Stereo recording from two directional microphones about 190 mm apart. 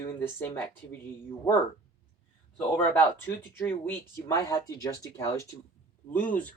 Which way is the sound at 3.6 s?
10° left (ahead or behind).